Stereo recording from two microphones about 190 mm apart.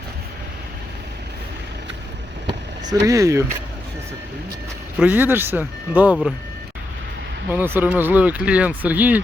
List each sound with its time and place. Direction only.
2.9 s speech: 15° right (ahead or behind)
4.9 s speech: 10° right (ahead or behind)
7.5 s speech: 10° right (ahead or behind)